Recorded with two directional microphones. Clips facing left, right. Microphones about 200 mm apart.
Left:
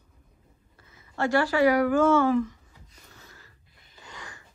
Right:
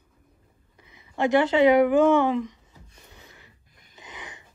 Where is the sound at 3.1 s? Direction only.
20° right (ahead or behind).